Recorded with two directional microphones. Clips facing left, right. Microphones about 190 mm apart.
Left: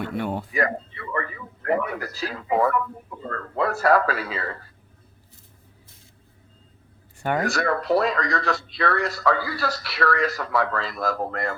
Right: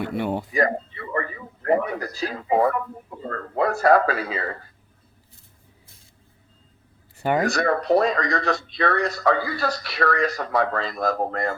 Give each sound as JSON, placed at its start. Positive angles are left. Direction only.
{"t": 0.2, "sound": "speech", "side_deg": -10}
{"t": 0.5, "sound": "speech", "side_deg": -35}
{"t": 2.0, "sound": "speech", "side_deg": -20}
{"t": 2.4, "sound": "speech", "side_deg": -35}
{"t": 3.6, "sound": "speech", "side_deg": -25}
{"t": 7.3, "sound": "speech", "side_deg": -20}
{"t": 7.6, "sound": "speech", "side_deg": -40}
{"t": 8.2, "sound": "speech", "side_deg": -20}
{"t": 10.0, "sound": "speech", "side_deg": -30}
{"t": 10.3, "sound": "speech", "side_deg": -20}
{"t": 10.8, "sound": "speech", "side_deg": -40}